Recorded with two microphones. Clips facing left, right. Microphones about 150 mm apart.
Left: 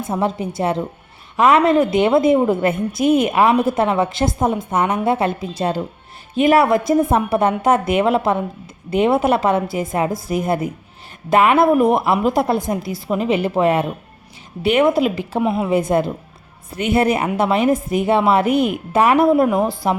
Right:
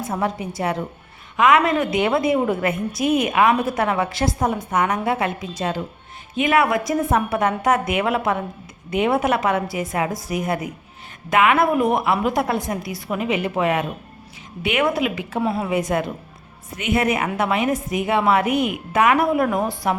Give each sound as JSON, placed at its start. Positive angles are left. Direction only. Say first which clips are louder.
{"t": 0.0, "sound": "a woman's voice", "louder": "left 3 dB", "side_deg": 25}
{"t": 15.4, "sound": "a woman's voice", "louder": "left 3 dB", "side_deg": 15}
{"t": 16.7, "sound": "a woman's voice", "louder": "left 4 dB", "side_deg": 30}